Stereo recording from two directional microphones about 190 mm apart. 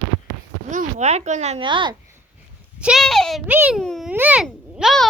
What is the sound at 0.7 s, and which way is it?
A woman's voice, 40° right (ahead or behind).